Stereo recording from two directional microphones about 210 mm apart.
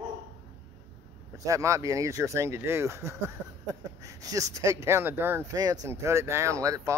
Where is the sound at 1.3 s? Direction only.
15° right (ahead or behind).